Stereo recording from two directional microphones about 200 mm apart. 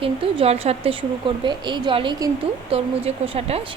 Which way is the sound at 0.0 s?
30° right (ahead or behind).